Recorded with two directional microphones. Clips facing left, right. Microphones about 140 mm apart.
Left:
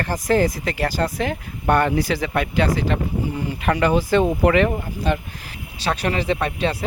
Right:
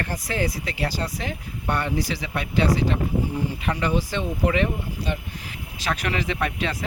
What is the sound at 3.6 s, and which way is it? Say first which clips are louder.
Speech: left 8 dB; 65° left (ahead or behind).